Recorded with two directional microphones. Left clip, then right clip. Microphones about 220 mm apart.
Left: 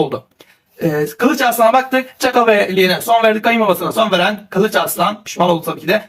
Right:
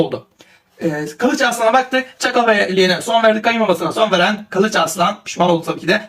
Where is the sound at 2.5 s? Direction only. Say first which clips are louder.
Left 1 dB; 15° left (ahead or behind).